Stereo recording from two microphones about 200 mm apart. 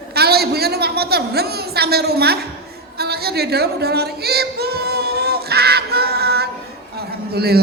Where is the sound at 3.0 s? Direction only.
50° right (ahead or behind).